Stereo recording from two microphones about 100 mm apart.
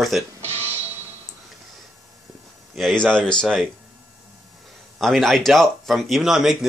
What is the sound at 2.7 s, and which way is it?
Speech, 5° left (ahead or behind).